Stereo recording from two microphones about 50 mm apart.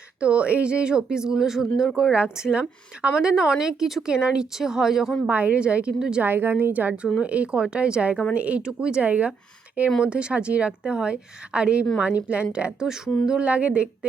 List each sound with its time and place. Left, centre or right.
0.2 s a woman's voice: right; by 2.1 s centre
2.1 s speech: centre
4.1 s speech: centre
5.3 s a woman's voice: right
6.2 s a woman's voice: right; by 9.0 s centre
9.0 s a woman's voice: right
10.0 s a woman's voice: centre